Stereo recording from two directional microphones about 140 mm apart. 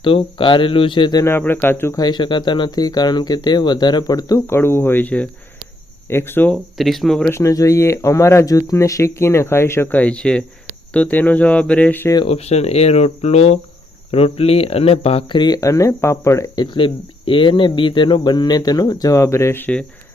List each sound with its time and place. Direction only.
0.0 s speech: 40° left (ahead or behind)
1.2 s speech: 15° left (ahead or behind)
2.0 s speech: 30° left (ahead or behind); by 6.6 s 15° left (ahead or behind)
6.7 s speech: centre (ahead or behind)
7.3 s speech: 20° left (ahead or behind)
12.3 s speech: 50° left (ahead or behind); by 19.8 s 15° left (ahead or behind)